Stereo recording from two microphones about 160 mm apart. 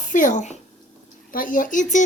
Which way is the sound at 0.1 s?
55° left (ahead or behind).